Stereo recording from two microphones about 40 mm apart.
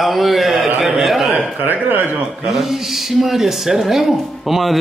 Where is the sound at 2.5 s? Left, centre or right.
Centre.